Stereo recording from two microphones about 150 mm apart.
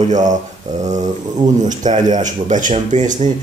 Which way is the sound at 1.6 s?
55° right (ahead or behind).